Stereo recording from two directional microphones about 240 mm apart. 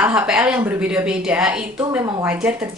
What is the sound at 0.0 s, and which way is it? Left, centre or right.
A woman's voice, centre.